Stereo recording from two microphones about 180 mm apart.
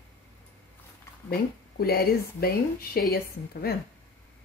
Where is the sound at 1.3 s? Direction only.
60° left (ahead or behind).